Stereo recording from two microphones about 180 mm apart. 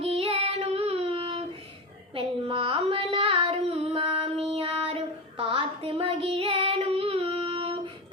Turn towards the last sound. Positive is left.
turn(degrees=-30)  # may be behind; listen again after turning